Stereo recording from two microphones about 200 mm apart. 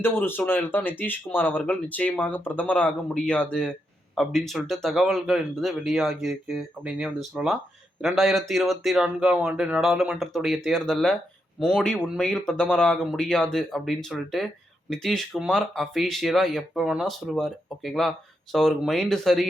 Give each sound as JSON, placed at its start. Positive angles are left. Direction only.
{"t": 0.0, "sound": "speech", "side_deg": 10}